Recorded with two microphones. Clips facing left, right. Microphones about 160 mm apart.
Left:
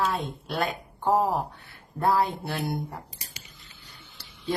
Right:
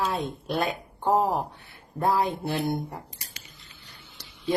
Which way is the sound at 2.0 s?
20° right (ahead or behind).